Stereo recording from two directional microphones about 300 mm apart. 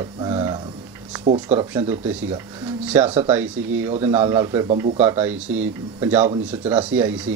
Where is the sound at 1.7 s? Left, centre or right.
Centre.